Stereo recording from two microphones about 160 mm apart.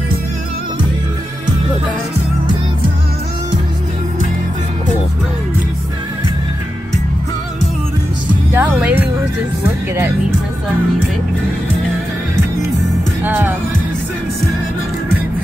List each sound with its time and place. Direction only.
8.5 s music: 10° right (ahead or behind)
13.2 s music: 15° right (ahead or behind)